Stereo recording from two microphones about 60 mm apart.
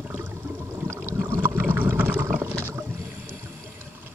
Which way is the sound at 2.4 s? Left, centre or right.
Right.